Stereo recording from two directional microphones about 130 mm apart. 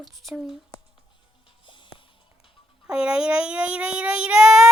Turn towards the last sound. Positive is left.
turn(degrees=-5)  # may be behind; listen again after turning